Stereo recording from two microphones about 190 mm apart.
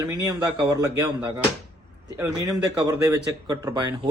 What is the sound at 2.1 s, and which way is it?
A man's voice, 15° right (ahead or behind).